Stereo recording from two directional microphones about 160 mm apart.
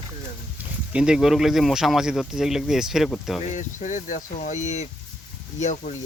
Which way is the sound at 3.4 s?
50° left (ahead or behind).